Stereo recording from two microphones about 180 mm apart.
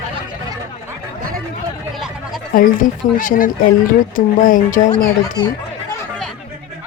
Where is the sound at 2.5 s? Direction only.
50° left (ahead or behind).